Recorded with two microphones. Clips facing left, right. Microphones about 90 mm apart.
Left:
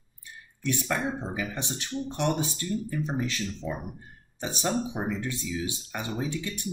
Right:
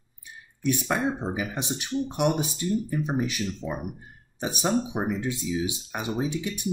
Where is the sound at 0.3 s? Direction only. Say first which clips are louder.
Right 4 dB; 15° right (ahead or behind).